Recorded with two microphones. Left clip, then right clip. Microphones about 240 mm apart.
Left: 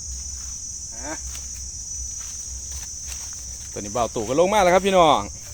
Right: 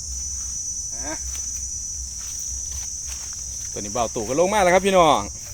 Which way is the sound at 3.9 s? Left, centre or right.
Centre.